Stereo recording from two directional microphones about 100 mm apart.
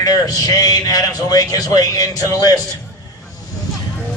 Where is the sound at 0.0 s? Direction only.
40° left (ahead or behind).